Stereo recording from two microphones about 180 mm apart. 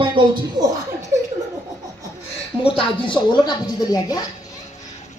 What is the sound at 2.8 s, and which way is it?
Speech, 25° left (ahead or behind).